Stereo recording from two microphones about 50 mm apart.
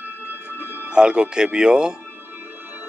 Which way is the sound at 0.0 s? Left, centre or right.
Right.